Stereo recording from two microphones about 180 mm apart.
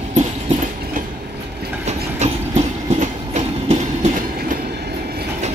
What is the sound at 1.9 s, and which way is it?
Train, 40° right (ahead or behind).